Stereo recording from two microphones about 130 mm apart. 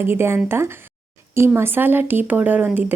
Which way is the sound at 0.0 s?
15° right (ahead or behind).